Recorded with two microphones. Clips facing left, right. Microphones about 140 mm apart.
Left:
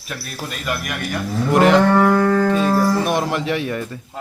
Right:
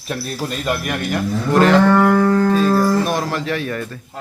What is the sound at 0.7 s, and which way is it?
Speech, 30° right (ahead or behind).